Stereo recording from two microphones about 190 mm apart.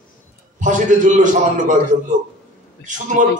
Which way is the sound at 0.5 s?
40° right (ahead or behind).